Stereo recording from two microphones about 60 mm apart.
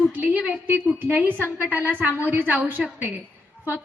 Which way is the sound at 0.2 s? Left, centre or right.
Right.